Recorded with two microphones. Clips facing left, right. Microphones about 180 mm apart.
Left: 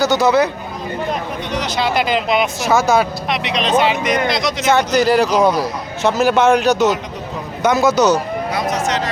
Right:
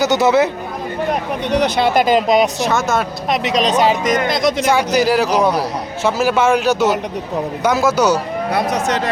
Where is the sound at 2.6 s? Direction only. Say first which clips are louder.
Left 3 dB; centre (ahead or behind).